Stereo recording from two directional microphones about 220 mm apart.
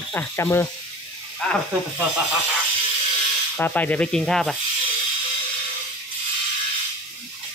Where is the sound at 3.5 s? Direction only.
5° left (ahead or behind).